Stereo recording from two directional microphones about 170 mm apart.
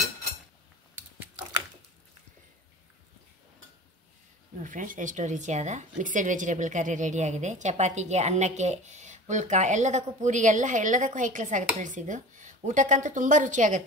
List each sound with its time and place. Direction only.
4.6 s a woman's voice: 50° right (ahead or behind)